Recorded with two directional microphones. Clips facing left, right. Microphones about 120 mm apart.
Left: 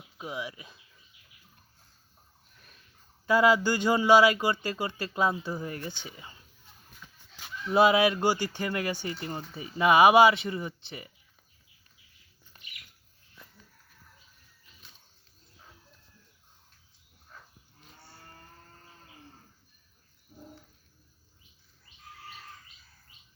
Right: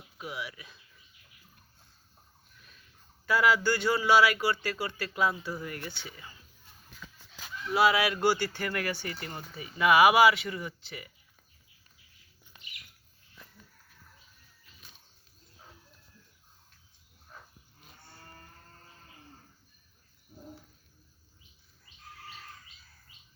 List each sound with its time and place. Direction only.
0.2 s speech: 20° left (ahead or behind)
2.6 s a sound: 40° left (ahead or behind)
3.2 s speech: 20° left (ahead or behind)
7.2 s goose: 90° right
7.7 s speech: 25° left (ahead or behind)
9.6 s speech: 30° left (ahead or behind)
13.4 s a sound: centre (ahead or behind)
17.3 s cattle: 15° right (ahead or behind)